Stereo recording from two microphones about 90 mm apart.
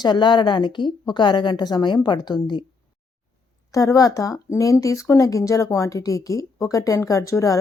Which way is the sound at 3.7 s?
40° left (ahead or behind).